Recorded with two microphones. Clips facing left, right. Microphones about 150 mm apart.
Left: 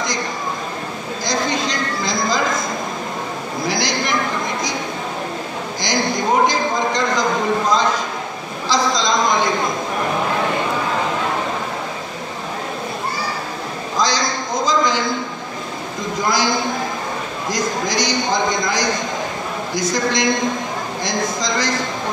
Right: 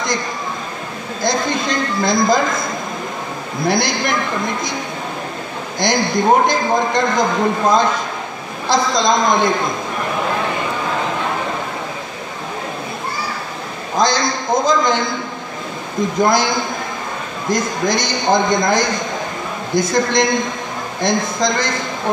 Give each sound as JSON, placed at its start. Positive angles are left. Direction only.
{"t": 1.2, "sound": "a man's voice", "side_deg": -55}
{"t": 3.6, "sound": "a man's voice", "side_deg": -55}
{"t": 5.8, "sound": "a man's voice", "side_deg": -55}
{"t": 13.9, "sound": "a man's voice", "side_deg": -55}
{"t": 16.2, "sound": "a man's voice", "side_deg": -55}
{"t": 17.5, "sound": "a man's voice", "side_deg": -55}